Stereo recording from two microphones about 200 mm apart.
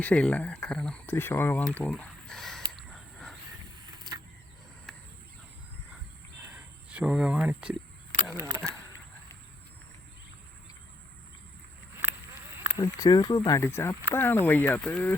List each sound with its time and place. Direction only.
0.0 s speech: 5° left (ahead or behind)
2.7 s a sound: centre (ahead or behind)
4.1 s vehicle: 25° right (ahead or behind)
6.5 s cricket: 5° right (ahead or behind)
8.4 s speech: 20° right (ahead or behind)
12.7 s speech: 20° left (ahead or behind)